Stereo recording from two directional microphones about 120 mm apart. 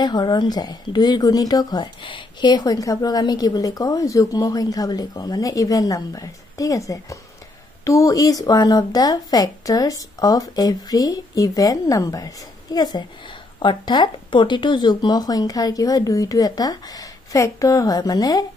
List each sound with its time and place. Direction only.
0.0 s speech: 35° left (ahead or behind)